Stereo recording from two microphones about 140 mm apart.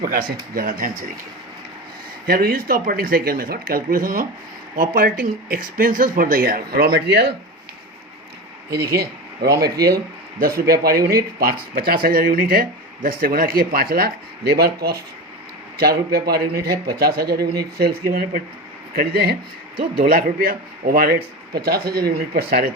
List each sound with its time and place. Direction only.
0.0 s speech: 90° right
2.2 s speech: 90° right
8.8 s speech: 90° right
16.1 s speech: 90° right